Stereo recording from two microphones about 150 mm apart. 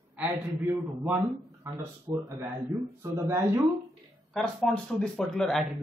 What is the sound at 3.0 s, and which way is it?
Speech, 15° right (ahead or behind).